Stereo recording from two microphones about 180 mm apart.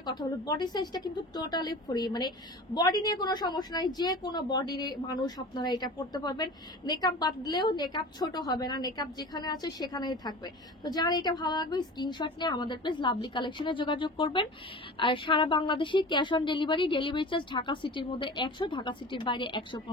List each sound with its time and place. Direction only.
0.0 s speech: 20° left (ahead or behind)